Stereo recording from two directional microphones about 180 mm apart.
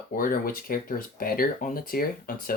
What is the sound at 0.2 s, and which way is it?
Speech, 50° left (ahead or behind).